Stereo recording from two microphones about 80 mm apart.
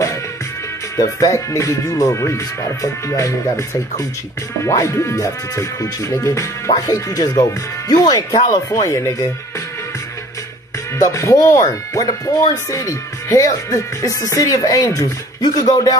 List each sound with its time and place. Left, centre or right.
0.9 s speech: left
8.6 s speech: left
11.0 s speech: left